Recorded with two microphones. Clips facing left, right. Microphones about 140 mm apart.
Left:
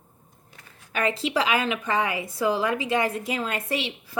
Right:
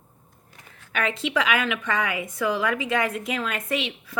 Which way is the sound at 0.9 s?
35° left (ahead or behind).